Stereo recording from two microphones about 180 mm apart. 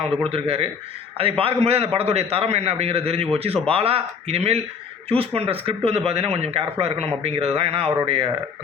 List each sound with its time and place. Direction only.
0.3 s speech: 35° right (ahead or behind)